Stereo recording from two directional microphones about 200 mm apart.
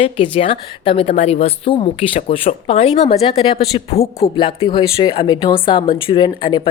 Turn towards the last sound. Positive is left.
turn(degrees=25)  # may be behind; listen again after turning